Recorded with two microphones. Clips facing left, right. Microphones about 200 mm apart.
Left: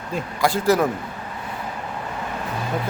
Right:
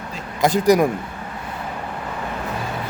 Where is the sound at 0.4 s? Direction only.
15° right (ahead or behind).